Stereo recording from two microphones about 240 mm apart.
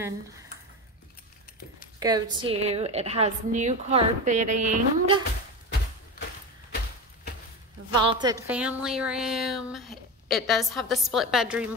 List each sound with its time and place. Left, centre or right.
2.0 s a woman's voice: centre
7.9 s a woman's voice: centre
8.5 s speech: centre